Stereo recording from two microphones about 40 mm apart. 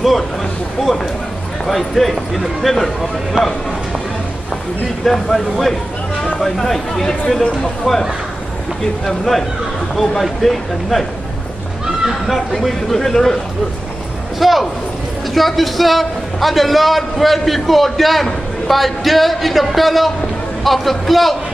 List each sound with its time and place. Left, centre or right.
1.7 s a man's voice: centre
3.4 s speech: right
5.0 s speech: centre
9.0 s a man's voice: centre
11.8 s a sound: centre
12.3 s a man's voice: centre
14.4 s a man's voice: centre